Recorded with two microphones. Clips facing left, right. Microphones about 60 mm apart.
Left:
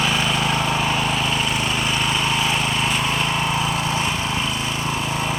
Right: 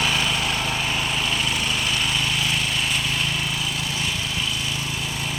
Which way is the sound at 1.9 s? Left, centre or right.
Left.